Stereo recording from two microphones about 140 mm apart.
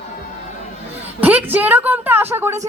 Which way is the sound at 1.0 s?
10° right (ahead or behind).